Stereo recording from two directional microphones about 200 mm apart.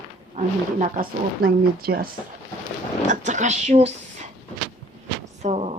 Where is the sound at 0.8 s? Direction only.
45° right (ahead or behind).